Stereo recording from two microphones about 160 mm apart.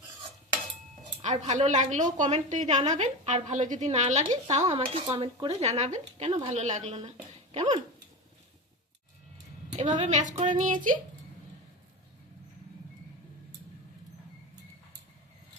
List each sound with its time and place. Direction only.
1.2 s a woman's voice: 50° right (ahead or behind)
5.0 s a woman's voice: 30° right (ahead or behind)
9.7 s a woman's voice: 50° right (ahead or behind)